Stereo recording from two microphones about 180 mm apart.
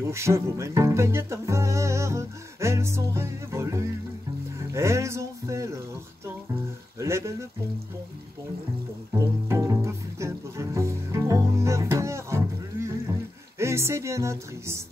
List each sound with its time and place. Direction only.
0.1 s speech: 15° right (ahead or behind)
4.7 s a sound: 15° right (ahead or behind)
7.0 s speech: 15° right (ahead or behind)
9.5 s music: 15° right (ahead or behind)
13.6 s speech: 15° right (ahead or behind)